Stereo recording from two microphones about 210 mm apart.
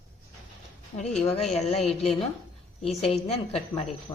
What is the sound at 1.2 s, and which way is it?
Speech, 30° left (ahead or behind).